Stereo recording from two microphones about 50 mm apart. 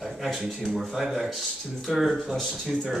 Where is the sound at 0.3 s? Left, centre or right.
Centre.